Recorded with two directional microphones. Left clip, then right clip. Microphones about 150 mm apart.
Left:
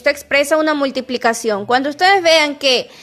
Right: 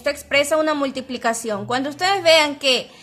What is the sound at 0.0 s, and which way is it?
A woman's voice, 40° left (ahead or behind).